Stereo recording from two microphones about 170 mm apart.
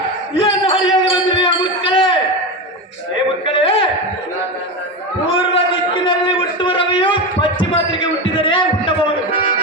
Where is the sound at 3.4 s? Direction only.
35° left (ahead or behind).